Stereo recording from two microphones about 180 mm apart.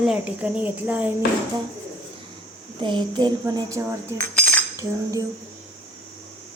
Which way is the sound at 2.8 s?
25° right (ahead or behind).